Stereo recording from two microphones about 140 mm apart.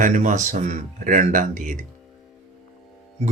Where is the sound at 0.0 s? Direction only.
65° right (ahead or behind).